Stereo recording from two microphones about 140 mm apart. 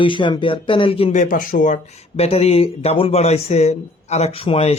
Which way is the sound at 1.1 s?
70° left (ahead or behind).